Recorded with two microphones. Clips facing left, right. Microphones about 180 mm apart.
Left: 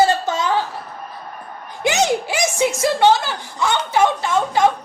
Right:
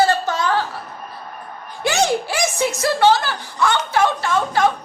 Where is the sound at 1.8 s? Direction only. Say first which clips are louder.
Left 1 dB; 20° left (ahead or behind).